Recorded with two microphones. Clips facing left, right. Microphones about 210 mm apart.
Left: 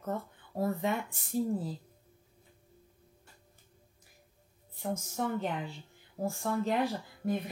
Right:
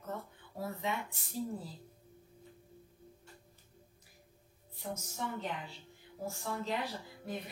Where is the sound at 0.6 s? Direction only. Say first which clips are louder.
Left 7 dB; 50° left (ahead or behind).